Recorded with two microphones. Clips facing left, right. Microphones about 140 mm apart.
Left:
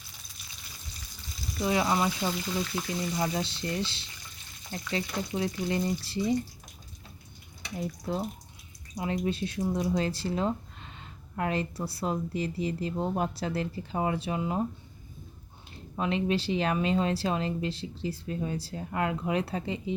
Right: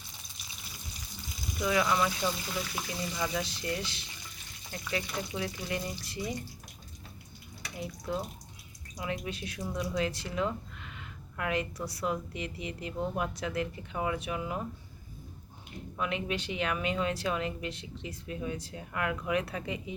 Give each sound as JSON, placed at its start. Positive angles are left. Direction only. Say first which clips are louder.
{"t": 1.6, "sound": "speech", "louder": "left 2 dB", "side_deg": 30}
{"t": 7.8, "sound": "speech", "louder": "left 3 dB", "side_deg": 35}
{"t": 15.7, "sound": "speech", "louder": "left 4 dB", "side_deg": 30}